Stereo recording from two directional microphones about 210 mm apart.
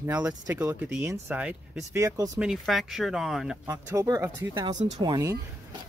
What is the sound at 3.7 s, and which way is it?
Speech, 10° right (ahead or behind).